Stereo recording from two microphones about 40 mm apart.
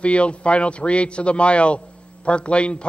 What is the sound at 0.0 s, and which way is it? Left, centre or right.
A man's voice, left.